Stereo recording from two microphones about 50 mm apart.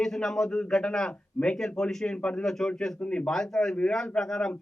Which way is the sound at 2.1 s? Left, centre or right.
Left.